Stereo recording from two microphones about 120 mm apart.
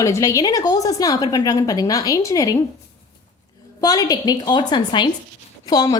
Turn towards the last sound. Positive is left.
turn(degrees=35)  # may be behind; listen again after turning